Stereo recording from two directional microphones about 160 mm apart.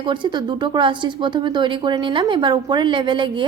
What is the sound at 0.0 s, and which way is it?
Speech, 30° right (ahead or behind).